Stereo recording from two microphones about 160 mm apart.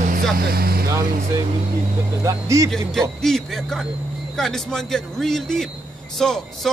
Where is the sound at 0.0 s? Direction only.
65° right (ahead or behind).